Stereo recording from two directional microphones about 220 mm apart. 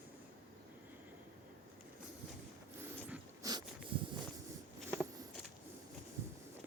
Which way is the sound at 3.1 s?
15° right (ahead or behind).